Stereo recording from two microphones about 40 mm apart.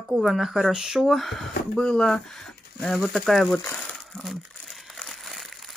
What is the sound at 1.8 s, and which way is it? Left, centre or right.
Speech, centre.